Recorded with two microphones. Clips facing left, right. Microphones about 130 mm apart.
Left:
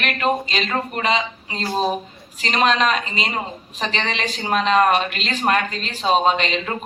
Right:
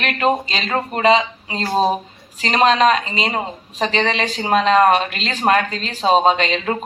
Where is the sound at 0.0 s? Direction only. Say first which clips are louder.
Right 3 dB; 35° right (ahead or behind).